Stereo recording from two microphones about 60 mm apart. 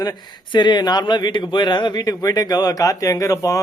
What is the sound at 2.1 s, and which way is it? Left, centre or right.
Speech, left.